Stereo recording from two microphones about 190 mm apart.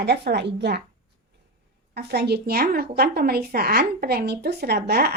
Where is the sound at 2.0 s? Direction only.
60° right (ahead or behind).